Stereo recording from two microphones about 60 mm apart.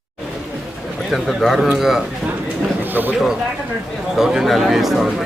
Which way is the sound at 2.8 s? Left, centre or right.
Right.